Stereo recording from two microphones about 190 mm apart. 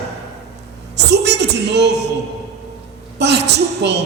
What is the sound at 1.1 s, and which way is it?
Speech, 65° right (ahead or behind).